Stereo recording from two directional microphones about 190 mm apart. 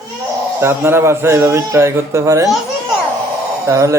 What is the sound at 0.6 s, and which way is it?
Speech, 15° right (ahead or behind).